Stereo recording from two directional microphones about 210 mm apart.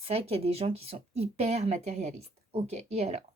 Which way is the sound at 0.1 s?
30° right (ahead or behind).